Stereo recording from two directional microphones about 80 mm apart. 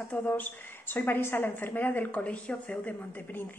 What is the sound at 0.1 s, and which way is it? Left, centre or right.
A woman's voice, left.